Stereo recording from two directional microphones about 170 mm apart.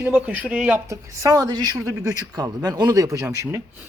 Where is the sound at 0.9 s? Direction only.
20° right (ahead or behind).